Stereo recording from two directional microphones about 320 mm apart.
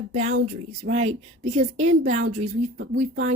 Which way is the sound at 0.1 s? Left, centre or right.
Right.